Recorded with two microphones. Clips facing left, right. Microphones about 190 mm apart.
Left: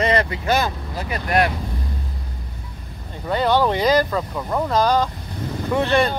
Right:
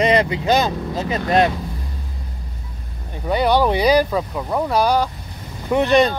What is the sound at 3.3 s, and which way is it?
Speech, 15° right (ahead or behind).